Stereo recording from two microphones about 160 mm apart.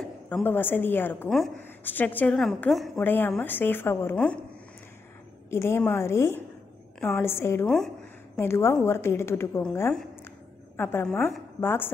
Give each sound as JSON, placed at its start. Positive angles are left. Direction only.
{"t": 0.0, "sound": "a woman's voice", "side_deg": 10}
{"t": 3.0, "sound": "a woman's voice", "side_deg": 10}
{"t": 5.5, "sound": "a woman's voice", "side_deg": 15}
{"t": 7.6, "sound": "a woman's voice", "side_deg": 5}
{"t": 8.4, "sound": "a woman's voice", "side_deg": 15}
{"t": 11.1, "sound": "a woman's voice", "side_deg": 5}
{"t": 11.6, "sound": "a woman's voice", "side_deg": 15}